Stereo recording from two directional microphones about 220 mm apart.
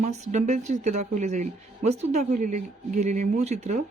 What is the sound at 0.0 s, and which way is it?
Speech, 30° right (ahead or behind).